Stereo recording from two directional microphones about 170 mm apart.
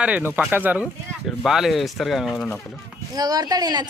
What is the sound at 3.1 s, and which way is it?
Speech, 20° right (ahead or behind).